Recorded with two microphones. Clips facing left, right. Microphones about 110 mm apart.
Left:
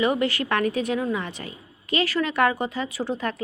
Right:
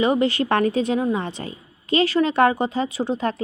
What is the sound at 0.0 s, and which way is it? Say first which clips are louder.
A woman's voice: right 4 dB; 25° right (ahead or behind).